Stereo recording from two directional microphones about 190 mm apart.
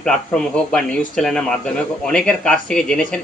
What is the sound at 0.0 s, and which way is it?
Speech, 5° left (ahead or behind).